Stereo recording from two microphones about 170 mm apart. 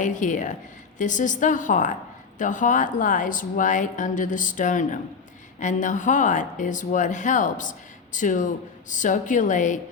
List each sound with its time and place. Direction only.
0.0 s speech: 45° left (ahead or behind)